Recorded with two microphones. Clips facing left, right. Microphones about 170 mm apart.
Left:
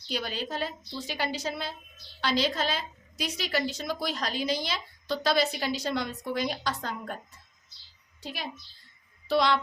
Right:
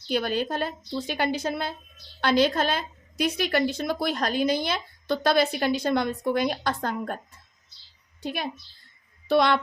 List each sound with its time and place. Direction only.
0.1 s a woman's voice: 55° right (ahead or behind)
8.2 s a woman's voice: 55° right (ahead or behind)